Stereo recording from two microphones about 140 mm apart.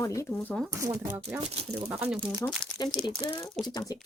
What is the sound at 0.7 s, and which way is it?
Speech, 20° right (ahead or behind).